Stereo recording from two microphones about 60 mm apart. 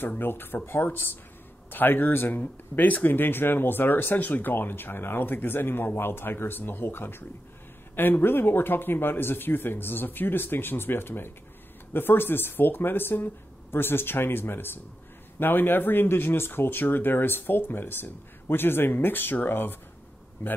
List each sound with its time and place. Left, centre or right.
0.2 s speech: left